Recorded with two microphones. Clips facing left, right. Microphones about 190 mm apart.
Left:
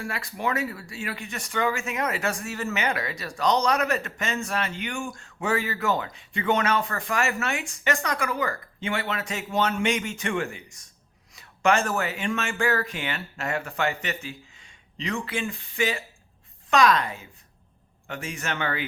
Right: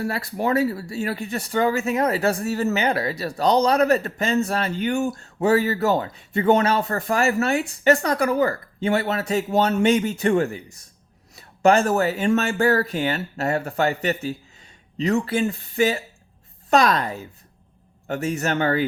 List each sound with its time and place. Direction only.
0.0 s a man's voice: 40° right (ahead or behind)